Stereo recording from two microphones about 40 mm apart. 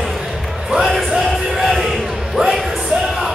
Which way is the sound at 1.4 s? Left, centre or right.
Centre.